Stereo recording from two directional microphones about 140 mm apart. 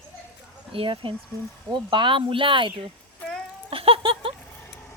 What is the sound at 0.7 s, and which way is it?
Speech, 40° right (ahead or behind).